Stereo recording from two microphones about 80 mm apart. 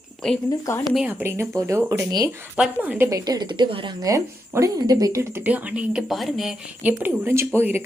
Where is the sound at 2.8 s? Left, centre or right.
Right.